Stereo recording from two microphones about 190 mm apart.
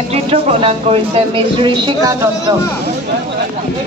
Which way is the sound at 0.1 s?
35° right (ahead or behind).